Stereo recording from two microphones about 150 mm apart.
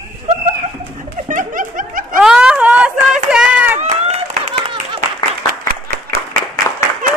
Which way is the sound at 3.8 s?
45° right (ahead or behind).